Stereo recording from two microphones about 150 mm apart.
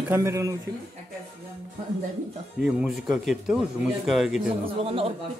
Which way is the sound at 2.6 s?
5° right (ahead or behind).